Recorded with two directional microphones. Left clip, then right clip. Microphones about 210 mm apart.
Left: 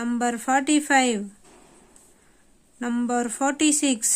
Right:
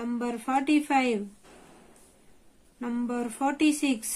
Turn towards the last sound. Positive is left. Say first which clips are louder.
# left 4 dB
turn(degrees=40)  # may be behind; listen again after turning